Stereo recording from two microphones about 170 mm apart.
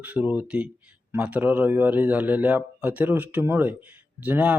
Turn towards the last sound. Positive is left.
turn(degrees=-10)  # may be behind; listen again after turning